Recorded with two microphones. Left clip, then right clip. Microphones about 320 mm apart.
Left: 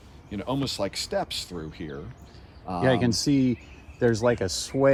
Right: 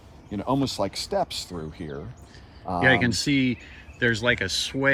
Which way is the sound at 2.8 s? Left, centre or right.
Centre.